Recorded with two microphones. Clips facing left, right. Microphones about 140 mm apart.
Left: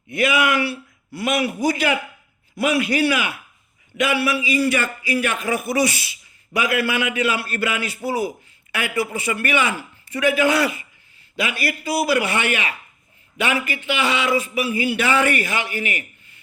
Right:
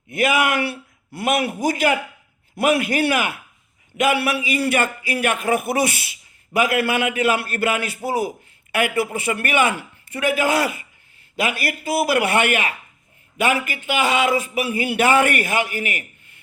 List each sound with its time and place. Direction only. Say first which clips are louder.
0.1 s a man's voice: even; 45° right (ahead or behind)